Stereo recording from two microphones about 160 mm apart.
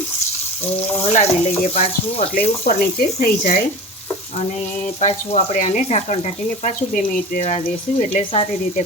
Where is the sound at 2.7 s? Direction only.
65° left (ahead or behind).